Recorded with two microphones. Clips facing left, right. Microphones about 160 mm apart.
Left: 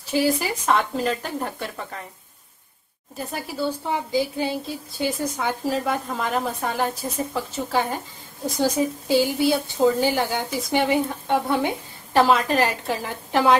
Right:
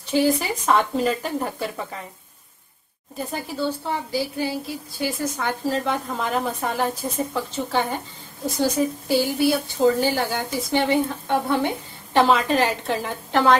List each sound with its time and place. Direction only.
0.1 s a woman's voice: 5° left (ahead or behind)
3.2 s a woman's voice: centre (ahead or behind); by 5.1 s 25° left (ahead or behind)
5.4 s a woman's voice: 10° left (ahead or behind)
8.5 s a woman's voice: 15° left (ahead or behind)